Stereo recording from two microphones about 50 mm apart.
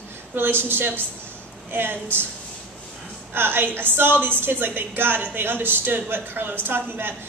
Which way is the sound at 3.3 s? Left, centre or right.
Right.